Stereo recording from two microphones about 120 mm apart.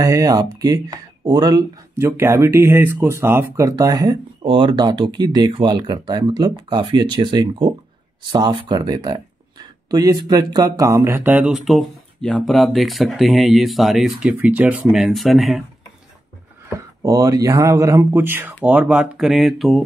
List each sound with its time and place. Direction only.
0.0 s speech: 30° right (ahead or behind)
2.0 s speech: 20° right (ahead or behind)
4.4 s speech: 45° right (ahead or behind); by 11.5 s 15° right (ahead or behind)
11.5 s speech: centre (ahead or behind)
16.7 s speech: 30° right (ahead or behind); by 19.8 s centre (ahead or behind)